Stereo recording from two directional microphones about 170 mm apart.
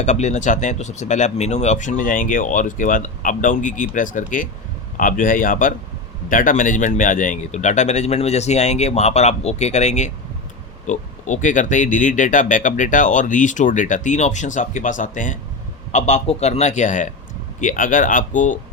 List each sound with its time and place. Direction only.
0.0 s speech: 45° left (ahead or behind)